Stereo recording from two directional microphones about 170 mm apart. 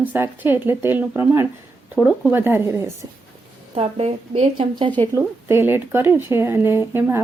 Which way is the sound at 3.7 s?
35° right (ahead or behind).